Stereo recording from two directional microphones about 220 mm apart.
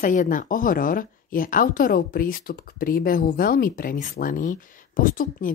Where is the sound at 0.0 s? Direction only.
35° left (ahead or behind).